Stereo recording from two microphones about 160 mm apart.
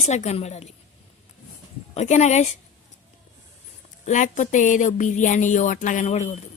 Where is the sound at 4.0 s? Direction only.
50° left (ahead or behind).